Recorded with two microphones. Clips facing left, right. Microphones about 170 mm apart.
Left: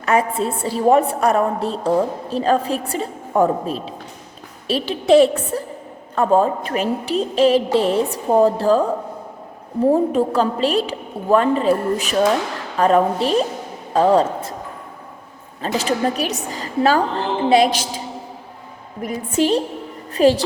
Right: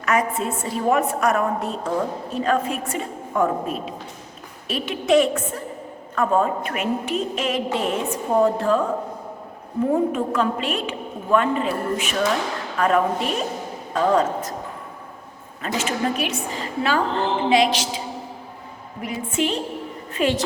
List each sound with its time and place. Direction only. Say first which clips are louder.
0.0 s a woman's voice: left 3 dB; 30° left (ahead or behind)
15.6 s a woman's voice: left 4 dB; 35° left (ahead or behind)
19.0 s a woman's voice: left 5 dB; 35° left (ahead or behind)